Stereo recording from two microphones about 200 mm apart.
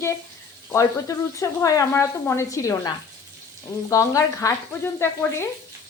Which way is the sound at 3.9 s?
15° left (ahead or behind).